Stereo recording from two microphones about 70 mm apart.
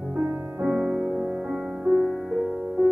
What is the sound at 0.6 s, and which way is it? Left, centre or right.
Music, centre.